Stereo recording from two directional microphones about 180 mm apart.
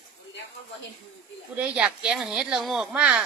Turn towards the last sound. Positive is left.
turn(degrees=-5)  # may be behind; listen again after turning